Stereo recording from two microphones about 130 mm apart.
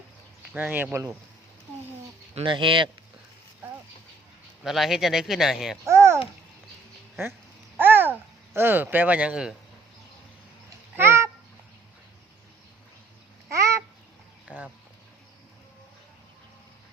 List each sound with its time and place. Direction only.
0.5 s speech: 15° right (ahead or behind)
2.3 s speech: 40° right (ahead or behind)
4.6 s speech: centre (ahead or behind)
5.8 s a child's voice: 20° right (ahead or behind)
7.8 s a child's voice: 15° right (ahead or behind)
10.9 s a sound: 20° right (ahead or behind)
13.5 s babbling: 25° right (ahead or behind)
14.4 s a sound: 10° right (ahead or behind)